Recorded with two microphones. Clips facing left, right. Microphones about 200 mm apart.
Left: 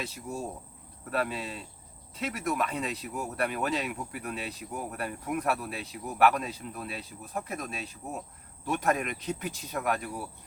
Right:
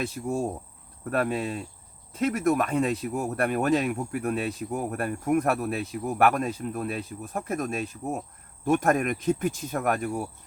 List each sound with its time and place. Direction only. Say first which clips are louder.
0.0 s speech: right 8 dB; 50° right (ahead or behind)